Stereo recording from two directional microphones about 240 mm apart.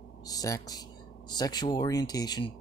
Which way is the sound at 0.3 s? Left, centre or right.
Centre.